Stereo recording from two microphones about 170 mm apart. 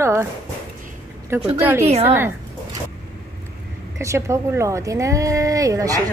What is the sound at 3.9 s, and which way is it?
A woman's voice, 15° right (ahead or behind).